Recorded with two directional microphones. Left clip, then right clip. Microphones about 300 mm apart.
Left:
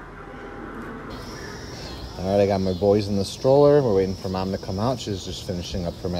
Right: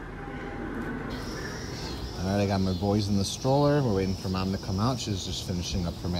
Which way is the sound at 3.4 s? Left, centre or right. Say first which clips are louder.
Left 9 dB; left.